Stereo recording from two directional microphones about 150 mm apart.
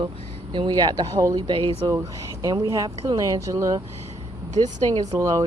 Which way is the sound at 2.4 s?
20° right (ahead or behind).